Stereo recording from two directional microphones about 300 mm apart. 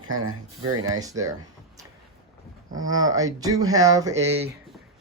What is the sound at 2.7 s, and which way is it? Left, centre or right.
Speech, centre.